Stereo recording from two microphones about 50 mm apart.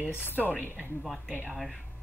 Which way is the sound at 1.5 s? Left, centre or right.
Centre.